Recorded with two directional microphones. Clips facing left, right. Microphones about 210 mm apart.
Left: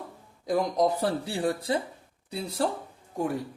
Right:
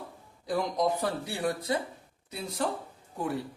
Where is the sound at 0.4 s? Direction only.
40° left (ahead or behind).